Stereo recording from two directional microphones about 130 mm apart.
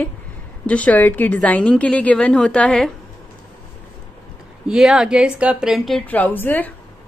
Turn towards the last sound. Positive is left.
turn(degrees=15)  # may be behind; listen again after turning